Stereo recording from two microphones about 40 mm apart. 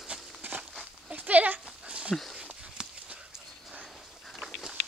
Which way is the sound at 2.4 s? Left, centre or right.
Right.